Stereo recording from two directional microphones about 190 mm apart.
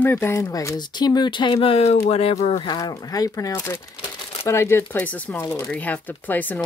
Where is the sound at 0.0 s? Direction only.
10° left (ahead or behind).